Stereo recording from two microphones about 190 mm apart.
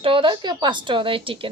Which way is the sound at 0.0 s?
25° right (ahead or behind).